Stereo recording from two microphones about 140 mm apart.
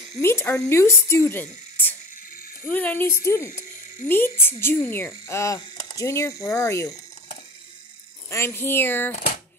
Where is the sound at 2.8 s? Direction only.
15° left (ahead or behind).